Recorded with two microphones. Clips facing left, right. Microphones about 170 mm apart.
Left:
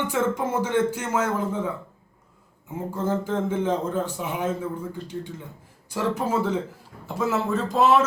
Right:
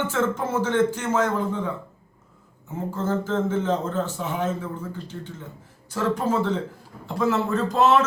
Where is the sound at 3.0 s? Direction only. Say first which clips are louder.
Right 1 dB; 15° left (ahead or behind).